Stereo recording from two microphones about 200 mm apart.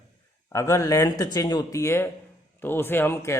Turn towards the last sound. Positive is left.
turn(degrees=10)  # may be behind; listen again after turning